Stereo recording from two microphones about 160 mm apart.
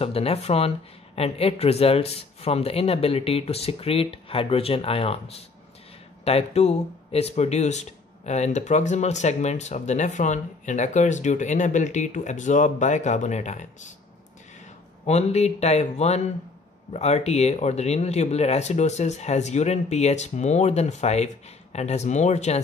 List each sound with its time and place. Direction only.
0.0 s speech: 40° left (ahead or behind)
15.0 s speech: 45° left (ahead or behind)